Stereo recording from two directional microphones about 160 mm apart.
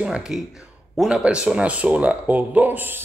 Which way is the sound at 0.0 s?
5° right (ahead or behind).